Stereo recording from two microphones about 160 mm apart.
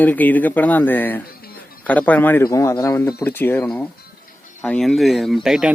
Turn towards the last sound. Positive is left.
turn(degrees=0)  # may be behind; listen again after turning